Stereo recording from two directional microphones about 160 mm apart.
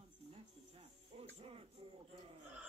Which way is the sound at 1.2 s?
35° right (ahead or behind).